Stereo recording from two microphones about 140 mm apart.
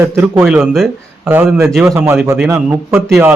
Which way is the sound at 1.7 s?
Centre (ahead or behind).